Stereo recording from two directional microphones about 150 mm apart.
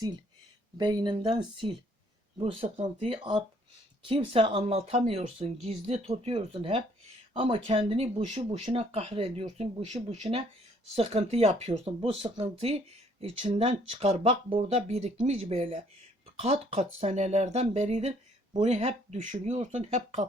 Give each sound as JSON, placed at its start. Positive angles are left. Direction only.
{"t": 0.8, "sound": "speech", "side_deg": -30}